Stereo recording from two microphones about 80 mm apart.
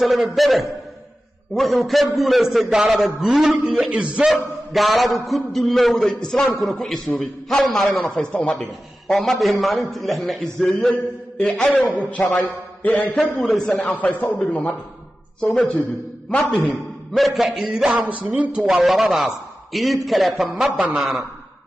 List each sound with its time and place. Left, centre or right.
0.0 s a man's voice: centre
4.3 s a man's voice: centre; by 12.3 s left
13.4 s a man's voice: centre
13.7 s a man's voice: centre
17.1 s a man's voice: centre
17.9 s speech: centre
18.6 s a man's voice: centre